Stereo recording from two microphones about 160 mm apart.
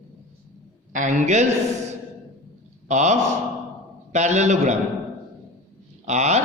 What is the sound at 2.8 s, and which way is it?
A man's voice, 45° right (ahead or behind).